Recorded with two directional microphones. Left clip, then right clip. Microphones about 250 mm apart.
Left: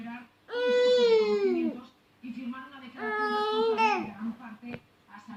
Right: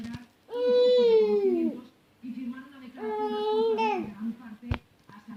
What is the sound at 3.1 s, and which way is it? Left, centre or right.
Baby cry, centre.